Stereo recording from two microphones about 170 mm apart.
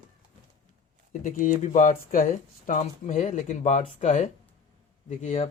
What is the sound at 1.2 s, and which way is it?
Speech, 50° left (ahead or behind).